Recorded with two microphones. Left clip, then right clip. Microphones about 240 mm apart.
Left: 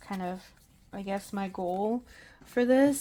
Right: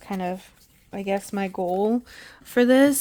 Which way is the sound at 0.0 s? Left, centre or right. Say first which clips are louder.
Right 7 dB; right.